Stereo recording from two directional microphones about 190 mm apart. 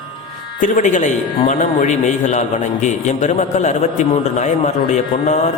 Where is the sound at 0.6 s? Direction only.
40° left (ahead or behind).